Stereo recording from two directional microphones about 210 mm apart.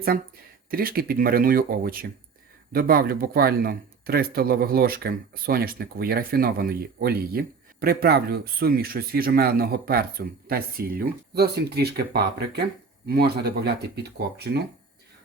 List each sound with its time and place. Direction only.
0.7 s speech: 45° right (ahead or behind)